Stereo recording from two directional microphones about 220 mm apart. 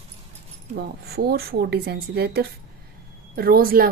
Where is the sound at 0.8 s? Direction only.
45° right (ahead or behind).